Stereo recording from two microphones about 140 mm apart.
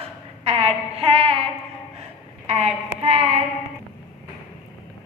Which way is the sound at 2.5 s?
50° right (ahead or behind).